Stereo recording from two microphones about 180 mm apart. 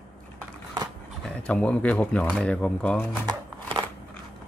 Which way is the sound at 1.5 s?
5° left (ahead or behind).